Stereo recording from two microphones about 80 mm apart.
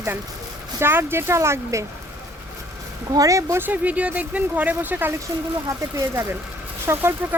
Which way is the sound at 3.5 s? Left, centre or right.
Right.